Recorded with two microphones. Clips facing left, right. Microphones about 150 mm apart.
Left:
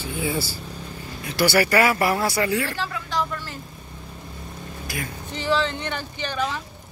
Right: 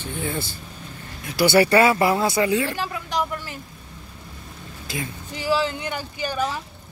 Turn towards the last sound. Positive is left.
turn(degrees=-10)  # may be behind; listen again after turning